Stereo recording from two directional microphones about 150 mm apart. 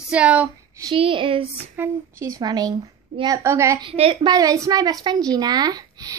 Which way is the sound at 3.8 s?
35° right (ahead or behind).